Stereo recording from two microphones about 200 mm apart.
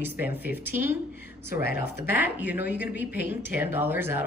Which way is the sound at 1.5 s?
55° left (ahead or behind).